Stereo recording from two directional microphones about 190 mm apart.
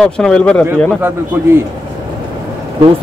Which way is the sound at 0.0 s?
5° left (ahead or behind).